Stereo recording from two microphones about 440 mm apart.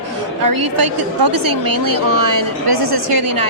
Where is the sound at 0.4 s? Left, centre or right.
Right.